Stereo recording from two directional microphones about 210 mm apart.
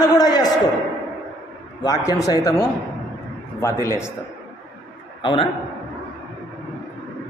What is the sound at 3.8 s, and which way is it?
Speech, 15° left (ahead or behind).